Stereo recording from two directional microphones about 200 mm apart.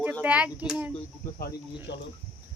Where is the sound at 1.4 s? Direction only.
50° left (ahead or behind).